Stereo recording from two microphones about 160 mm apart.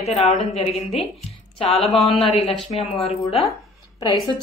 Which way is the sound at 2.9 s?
40° left (ahead or behind).